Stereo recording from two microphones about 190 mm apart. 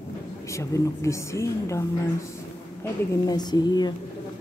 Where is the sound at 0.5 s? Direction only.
15° left (ahead or behind).